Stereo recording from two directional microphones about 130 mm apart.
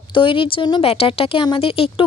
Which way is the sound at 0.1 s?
40° left (ahead or behind).